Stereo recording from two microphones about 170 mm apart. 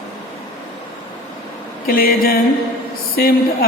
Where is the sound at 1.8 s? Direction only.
60° left (ahead or behind).